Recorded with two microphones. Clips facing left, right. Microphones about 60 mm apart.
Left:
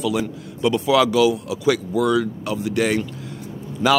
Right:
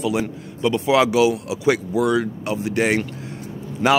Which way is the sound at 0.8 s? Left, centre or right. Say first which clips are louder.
Even; right.